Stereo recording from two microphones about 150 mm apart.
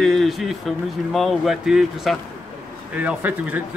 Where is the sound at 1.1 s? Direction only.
Centre (ahead or behind).